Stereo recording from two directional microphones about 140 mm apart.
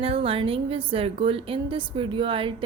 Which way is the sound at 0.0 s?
40° right (ahead or behind).